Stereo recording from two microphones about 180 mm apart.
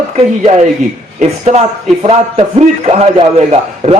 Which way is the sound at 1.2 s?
40° right (ahead or behind).